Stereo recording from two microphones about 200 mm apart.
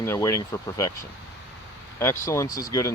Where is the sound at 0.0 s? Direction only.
15° left (ahead or behind).